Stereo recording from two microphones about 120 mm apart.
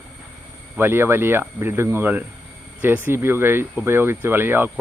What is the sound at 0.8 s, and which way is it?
A man's voice, 20° right (ahead or behind).